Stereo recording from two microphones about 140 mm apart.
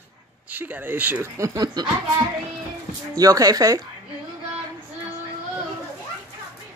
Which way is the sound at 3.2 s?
25° right (ahead or behind).